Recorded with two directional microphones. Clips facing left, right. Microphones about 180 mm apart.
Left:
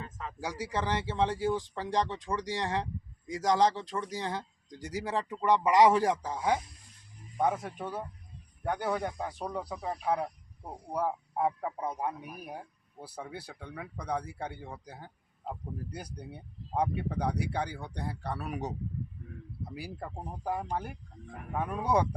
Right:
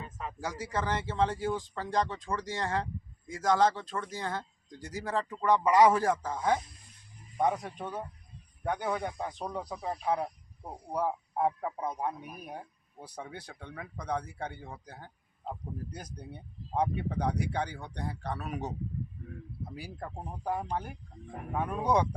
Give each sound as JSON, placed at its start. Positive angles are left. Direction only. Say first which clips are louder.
{"t": 0.0, "sound": "speech", "louder": "right 1 dB", "side_deg": -15}
{"t": 0.3, "sound": "speech", "louder": "left 1 dB", "side_deg": 10}
{"t": 19.7, "sound": "speech", "louder": "left 2 dB", "side_deg": 10}
{"t": 21.2, "sound": "speech", "louder": "right 1 dB", "side_deg": 45}
{"t": 21.5, "sound": "speech", "louder": "right 1 dB", "side_deg": 5}